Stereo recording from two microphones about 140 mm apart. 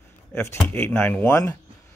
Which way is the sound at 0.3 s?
20° left (ahead or behind).